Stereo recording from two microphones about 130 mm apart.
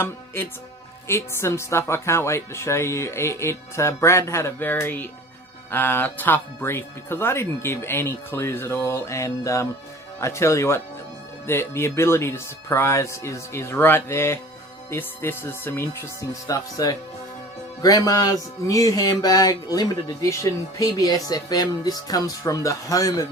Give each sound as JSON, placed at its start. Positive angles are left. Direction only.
{"t": 0.4, "sound": "speech", "side_deg": 20}